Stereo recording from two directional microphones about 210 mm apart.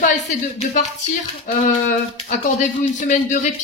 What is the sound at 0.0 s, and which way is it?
Speech, 35° left (ahead or behind).